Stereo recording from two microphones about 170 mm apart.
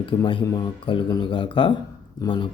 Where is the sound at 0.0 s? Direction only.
30° left (ahead or behind).